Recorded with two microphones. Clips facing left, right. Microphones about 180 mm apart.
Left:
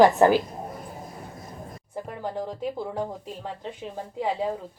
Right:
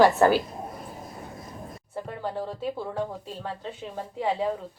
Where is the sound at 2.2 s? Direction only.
15° left (ahead or behind).